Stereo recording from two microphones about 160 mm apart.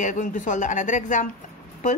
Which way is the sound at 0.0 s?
55° left (ahead or behind).